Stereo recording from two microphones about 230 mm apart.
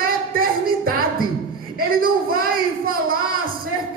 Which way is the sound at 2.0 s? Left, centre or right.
Right.